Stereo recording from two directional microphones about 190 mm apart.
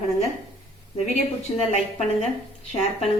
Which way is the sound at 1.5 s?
20° left (ahead or behind).